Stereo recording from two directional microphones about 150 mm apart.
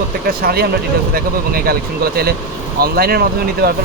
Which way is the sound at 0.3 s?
85° right.